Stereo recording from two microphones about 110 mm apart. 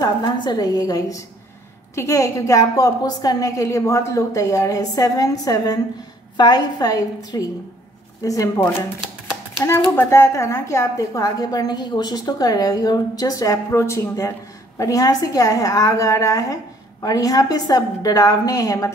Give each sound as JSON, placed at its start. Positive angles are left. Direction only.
{"t": 0.0, "sound": "a woman's voice", "side_deg": 40}
{"t": 9.7, "sound": "a woman's voice", "side_deg": 25}